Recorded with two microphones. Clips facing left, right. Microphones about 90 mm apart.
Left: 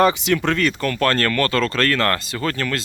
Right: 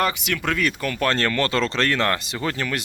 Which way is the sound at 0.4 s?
5° right (ahead or behind).